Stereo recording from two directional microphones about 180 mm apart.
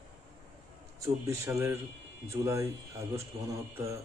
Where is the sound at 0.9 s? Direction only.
20° right (ahead or behind).